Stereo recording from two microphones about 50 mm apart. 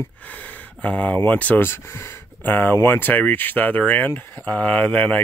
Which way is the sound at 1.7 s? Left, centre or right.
Left.